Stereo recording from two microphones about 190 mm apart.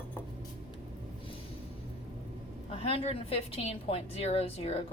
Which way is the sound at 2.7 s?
30° left (ahead or behind).